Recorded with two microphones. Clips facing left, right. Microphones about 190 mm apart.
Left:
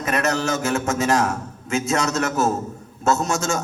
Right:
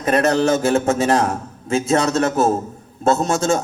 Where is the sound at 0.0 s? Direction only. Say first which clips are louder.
Right 6 dB; 30° right (ahead or behind).